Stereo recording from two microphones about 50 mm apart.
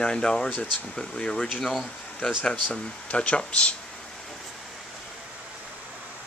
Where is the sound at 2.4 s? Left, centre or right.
Left.